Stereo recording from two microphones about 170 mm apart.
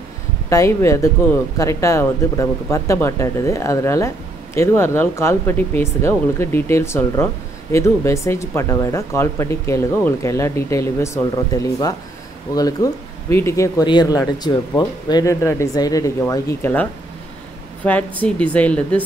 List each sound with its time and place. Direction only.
0.5 s speech: 15° left (ahead or behind)